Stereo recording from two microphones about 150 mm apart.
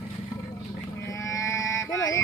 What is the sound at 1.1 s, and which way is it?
Livestock, 20° left (ahead or behind).